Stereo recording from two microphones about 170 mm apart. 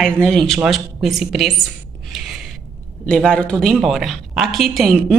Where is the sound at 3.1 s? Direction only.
5° left (ahead or behind).